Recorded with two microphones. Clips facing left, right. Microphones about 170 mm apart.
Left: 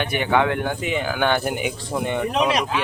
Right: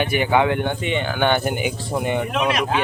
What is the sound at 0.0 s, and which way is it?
Speech, 5° right (ahead or behind).